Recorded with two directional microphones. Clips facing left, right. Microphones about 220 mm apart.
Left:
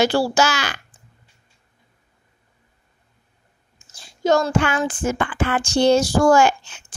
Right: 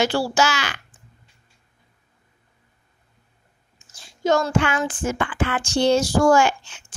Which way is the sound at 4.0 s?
35° left (ahead or behind).